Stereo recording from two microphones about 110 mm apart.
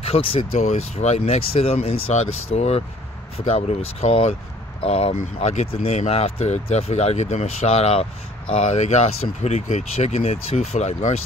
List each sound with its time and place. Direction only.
0.0 s speech: 60° left (ahead or behind); by 11.1 s 90° left